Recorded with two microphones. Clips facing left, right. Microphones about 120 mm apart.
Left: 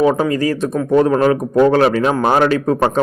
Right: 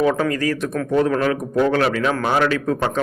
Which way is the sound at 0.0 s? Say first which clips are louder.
Left 4 dB; 25° left (ahead or behind).